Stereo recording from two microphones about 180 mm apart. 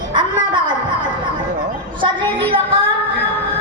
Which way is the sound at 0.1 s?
25° right (ahead or behind).